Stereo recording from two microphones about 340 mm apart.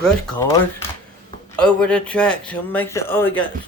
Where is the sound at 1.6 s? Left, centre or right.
Centre.